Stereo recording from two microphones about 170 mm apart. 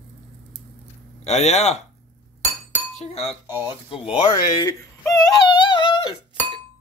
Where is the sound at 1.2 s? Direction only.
40° left (ahead or behind).